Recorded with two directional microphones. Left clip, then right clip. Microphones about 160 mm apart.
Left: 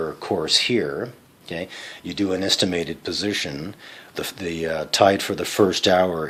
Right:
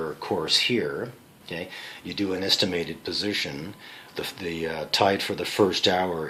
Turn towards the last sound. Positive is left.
turn(degrees=60)  # may be behind; listen again after turning